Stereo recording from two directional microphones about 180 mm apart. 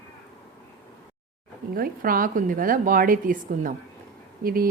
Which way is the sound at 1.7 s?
55° right (ahead or behind).